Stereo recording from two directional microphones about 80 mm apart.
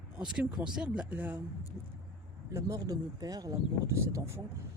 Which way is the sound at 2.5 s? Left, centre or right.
Right.